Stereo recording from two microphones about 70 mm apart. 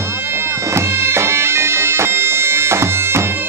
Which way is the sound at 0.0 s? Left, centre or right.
Right.